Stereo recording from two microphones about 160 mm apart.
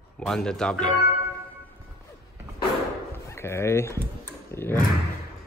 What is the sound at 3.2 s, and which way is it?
Speech, 15° left (ahead or behind).